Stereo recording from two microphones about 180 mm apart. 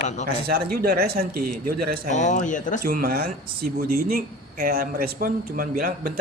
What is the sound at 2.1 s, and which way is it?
Speech, 40° left (ahead or behind).